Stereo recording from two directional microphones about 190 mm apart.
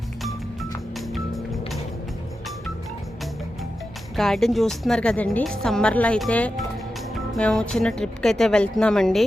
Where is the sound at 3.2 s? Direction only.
Centre (ahead or behind).